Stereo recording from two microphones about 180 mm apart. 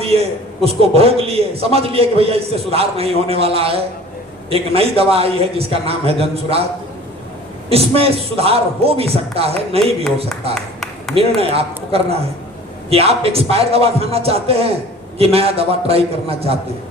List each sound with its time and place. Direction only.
0.0 s a man's voice: 35° right (ahead or behind)
7.7 s a man's voice: 35° right (ahead or behind)
10.5 s a sound: centre (ahead or behind)
11.1 s a man's voice: 35° right (ahead or behind)